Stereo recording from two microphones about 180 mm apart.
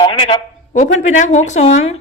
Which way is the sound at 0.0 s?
25° left (ahead or behind).